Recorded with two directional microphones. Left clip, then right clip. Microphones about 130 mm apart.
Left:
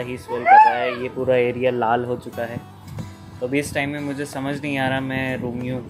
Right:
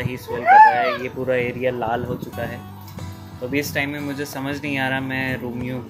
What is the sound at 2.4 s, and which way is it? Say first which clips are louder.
Speech: even; 20° left (ahead or behind).